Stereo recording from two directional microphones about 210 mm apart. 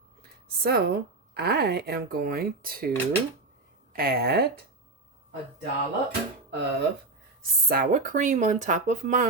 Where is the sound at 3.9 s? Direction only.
45° right (ahead or behind).